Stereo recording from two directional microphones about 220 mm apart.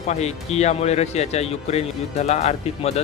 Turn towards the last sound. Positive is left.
turn(degrees=30)  # may be behind; listen again after turning